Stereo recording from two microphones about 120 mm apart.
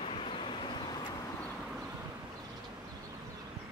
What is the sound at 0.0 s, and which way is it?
Vehicle, 50° left (ahead or behind).